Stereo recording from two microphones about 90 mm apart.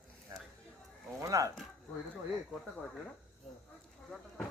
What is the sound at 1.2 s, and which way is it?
Speech, 40° right (ahead or behind).